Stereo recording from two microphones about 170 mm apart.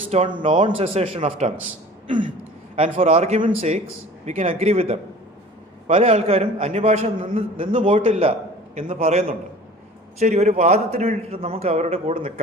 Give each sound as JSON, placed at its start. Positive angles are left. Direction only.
{"t": 0.1, "sound": "speech", "side_deg": -45}
{"t": 0.6, "sound": "a man's voice", "side_deg": -35}
{"t": 2.0, "sound": "throat clearing", "side_deg": -30}
{"t": 2.7, "sound": "a man's voice", "side_deg": -35}
{"t": 6.0, "sound": "a man's voice", "side_deg": -35}